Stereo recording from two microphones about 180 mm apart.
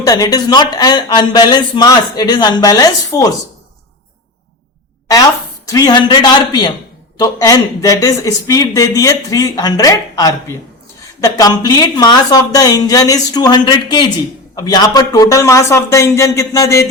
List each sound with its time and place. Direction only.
0.0 s speech: 20° left (ahead or behind)
5.6 s a man's voice: 20° left (ahead or behind)